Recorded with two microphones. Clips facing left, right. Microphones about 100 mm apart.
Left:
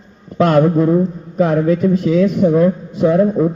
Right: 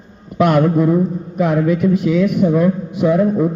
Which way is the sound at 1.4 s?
15° right (ahead or behind).